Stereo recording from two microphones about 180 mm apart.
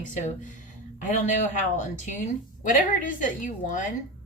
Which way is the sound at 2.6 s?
45° left (ahead or behind).